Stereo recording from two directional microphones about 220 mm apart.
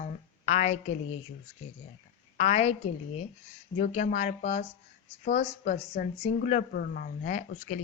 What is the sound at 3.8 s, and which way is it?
Speech, 40° left (ahead or behind).